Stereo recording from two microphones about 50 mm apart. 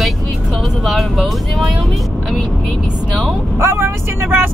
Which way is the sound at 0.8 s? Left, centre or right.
Centre.